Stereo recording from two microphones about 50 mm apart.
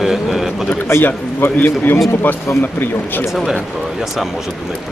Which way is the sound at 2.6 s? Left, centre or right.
Left.